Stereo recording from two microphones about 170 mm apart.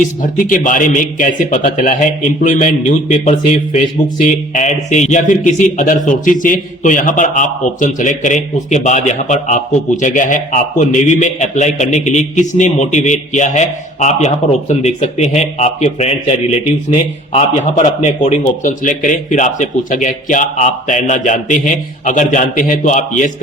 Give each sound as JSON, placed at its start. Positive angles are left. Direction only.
{"t": 0.0, "sound": "a man's voice", "side_deg": 50}
{"t": 17.3, "sound": "a man's voice", "side_deg": 40}